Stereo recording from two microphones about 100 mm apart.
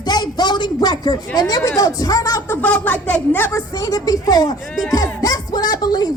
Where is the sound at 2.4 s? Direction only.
20° left (ahead or behind).